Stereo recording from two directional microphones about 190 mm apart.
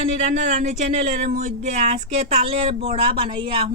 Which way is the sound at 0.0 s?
35° right (ahead or behind).